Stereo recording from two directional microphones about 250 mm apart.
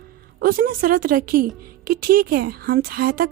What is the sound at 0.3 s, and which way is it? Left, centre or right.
Speech, right.